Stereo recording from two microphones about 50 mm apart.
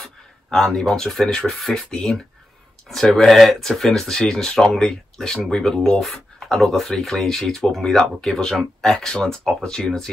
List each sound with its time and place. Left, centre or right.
0.0 s speech: centre